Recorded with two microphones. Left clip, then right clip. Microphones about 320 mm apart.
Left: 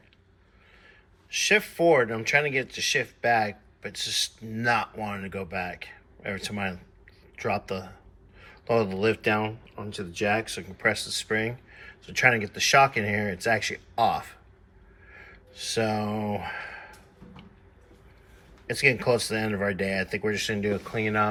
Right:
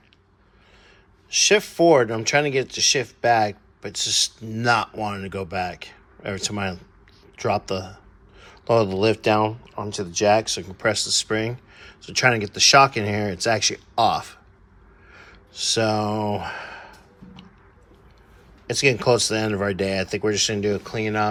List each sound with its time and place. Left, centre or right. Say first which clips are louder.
1.3 s speech: right 5 dB; centre
15.1 s gasp: right 5 dB; centre
16.6 s a sound: right 2 dB; right
18.7 s speech: right 4 dB; centre